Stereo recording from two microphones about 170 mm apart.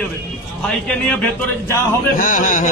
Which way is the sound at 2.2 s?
50° left (ahead or behind).